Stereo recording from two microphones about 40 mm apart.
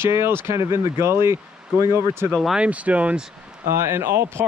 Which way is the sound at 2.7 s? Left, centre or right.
Right.